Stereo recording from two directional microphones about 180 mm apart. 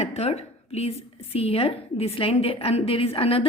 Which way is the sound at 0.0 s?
35° left (ahead or behind).